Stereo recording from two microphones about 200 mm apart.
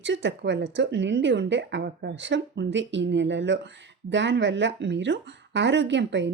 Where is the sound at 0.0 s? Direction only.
65° right (ahead or behind).